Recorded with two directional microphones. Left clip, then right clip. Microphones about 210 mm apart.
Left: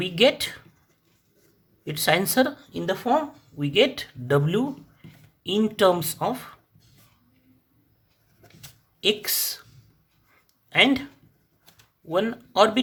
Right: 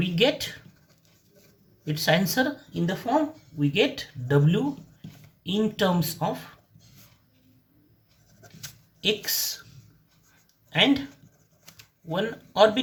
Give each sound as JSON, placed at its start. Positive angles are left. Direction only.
{"t": 0.0, "sound": "speech", "side_deg": 45}
{"t": 1.8, "sound": "speech", "side_deg": 45}
{"t": 9.0, "sound": "speech", "side_deg": 45}
{"t": 10.7, "sound": "speech", "side_deg": 45}
{"t": 12.1, "sound": "speech", "side_deg": 45}